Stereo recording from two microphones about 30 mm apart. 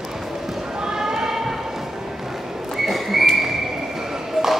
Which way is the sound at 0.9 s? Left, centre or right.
Centre.